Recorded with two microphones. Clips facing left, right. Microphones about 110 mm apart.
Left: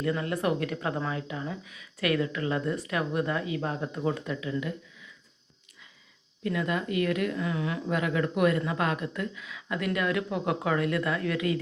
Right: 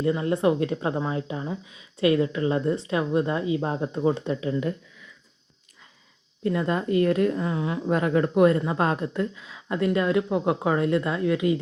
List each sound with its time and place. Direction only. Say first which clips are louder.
0.0 s a woman's voice: right 6 dB; 25° right (ahead or behind)
6.4 s a woman's voice: right 5 dB; 35° right (ahead or behind)